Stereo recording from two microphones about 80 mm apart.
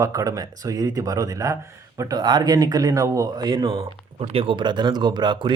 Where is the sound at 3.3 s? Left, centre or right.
Right.